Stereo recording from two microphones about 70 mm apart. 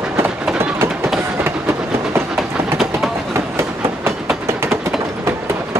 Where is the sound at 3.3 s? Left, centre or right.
Right.